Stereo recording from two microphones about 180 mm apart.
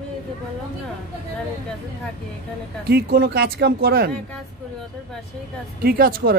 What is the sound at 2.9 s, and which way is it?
Speech, 65° right (ahead or behind).